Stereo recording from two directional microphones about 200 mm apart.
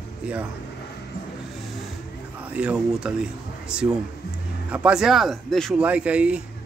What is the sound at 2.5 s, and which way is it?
Speech, 5° right (ahead or behind).